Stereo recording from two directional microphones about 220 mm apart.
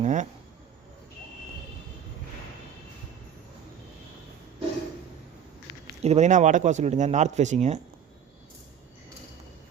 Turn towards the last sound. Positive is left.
turn(degrees=-30)  # may be behind; listen again after turning